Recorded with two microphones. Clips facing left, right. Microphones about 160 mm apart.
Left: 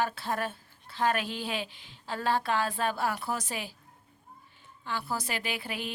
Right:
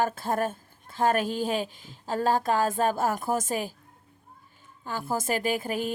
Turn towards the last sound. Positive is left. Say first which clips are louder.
# right 8 dB
turn(degrees=-45)  # may be behind; listen again after turning